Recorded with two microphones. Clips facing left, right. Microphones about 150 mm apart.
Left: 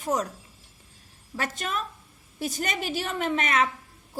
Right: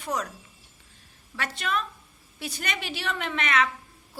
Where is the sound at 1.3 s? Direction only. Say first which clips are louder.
Right 1 dB; 40° left (ahead or behind).